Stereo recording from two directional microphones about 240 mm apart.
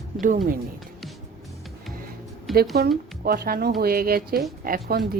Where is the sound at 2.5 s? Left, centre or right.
Centre.